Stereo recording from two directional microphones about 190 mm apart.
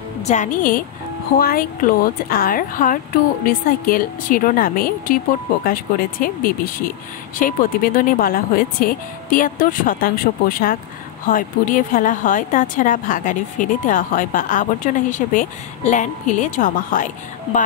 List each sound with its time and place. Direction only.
0.2 s a woman's voice: 40° left (ahead or behind)